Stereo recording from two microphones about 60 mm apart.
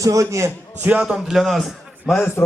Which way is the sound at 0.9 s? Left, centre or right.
Centre.